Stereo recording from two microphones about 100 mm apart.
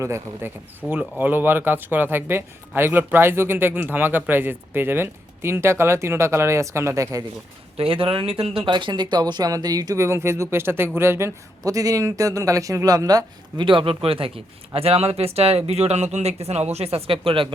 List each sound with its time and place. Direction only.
0.0 s a man's voice: 25° right (ahead or behind)
7.8 s speech: 65° right (ahead or behind); by 13.7 s 40° right (ahead or behind)
13.7 s speech: 60° right (ahead or behind)